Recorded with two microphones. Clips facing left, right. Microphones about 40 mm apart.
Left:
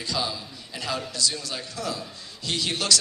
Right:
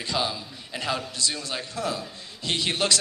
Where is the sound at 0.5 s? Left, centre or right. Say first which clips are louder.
Right 2 dB; right.